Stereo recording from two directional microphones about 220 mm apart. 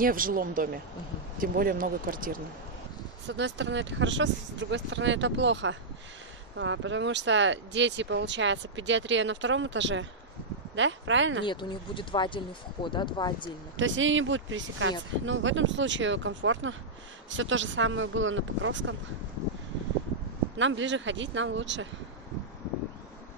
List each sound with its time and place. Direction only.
0.0 s speech: 40° right (ahead or behind)
3.3 s speech: 55° right (ahead or behind)
11.4 s speech: 20° left (ahead or behind)
13.7 s speech: 60° right (ahead or behind)
20.5 s speech: 55° right (ahead or behind)